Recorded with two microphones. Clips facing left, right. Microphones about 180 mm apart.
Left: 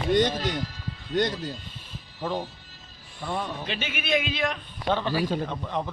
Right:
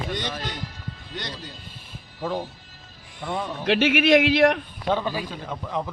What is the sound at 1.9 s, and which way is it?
Music, 5° right (ahead or behind).